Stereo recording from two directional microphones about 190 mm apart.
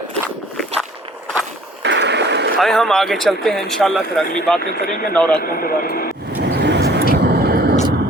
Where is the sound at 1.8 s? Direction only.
65° right (ahead or behind).